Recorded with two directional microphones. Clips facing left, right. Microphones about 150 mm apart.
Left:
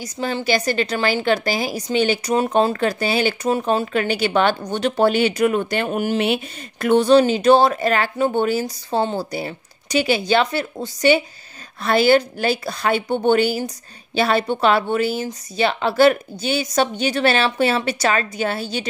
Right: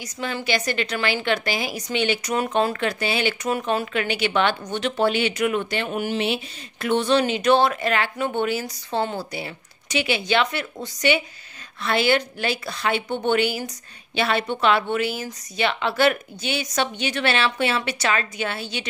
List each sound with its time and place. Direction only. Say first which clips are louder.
0.0 s a woman's voice: left 5 dB; 35° left (ahead or behind)